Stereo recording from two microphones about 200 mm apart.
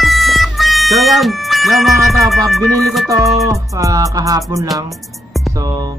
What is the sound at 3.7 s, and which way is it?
Speech, 15° right (ahead or behind).